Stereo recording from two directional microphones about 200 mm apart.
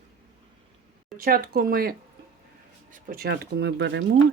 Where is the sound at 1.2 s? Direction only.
45° right (ahead or behind).